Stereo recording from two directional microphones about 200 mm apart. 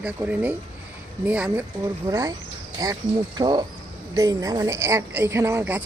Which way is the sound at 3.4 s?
20° right (ahead or behind).